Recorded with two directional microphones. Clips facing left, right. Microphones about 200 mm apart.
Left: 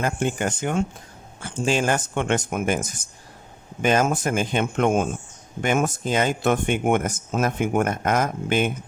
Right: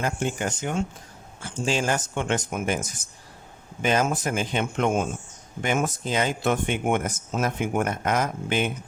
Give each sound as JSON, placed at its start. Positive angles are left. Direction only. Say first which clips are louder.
{"t": 0.0, "sound": "speech", "louder": "left 3 dB", "side_deg": 55}
{"t": 3.8, "sound": "speech", "louder": "left 3 dB", "side_deg": 50}